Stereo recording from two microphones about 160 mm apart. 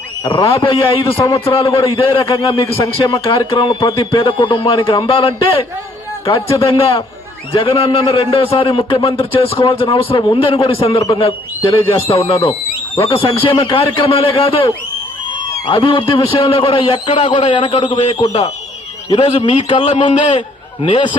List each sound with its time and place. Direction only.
0.3 s a man's voice: 35° left (ahead or behind)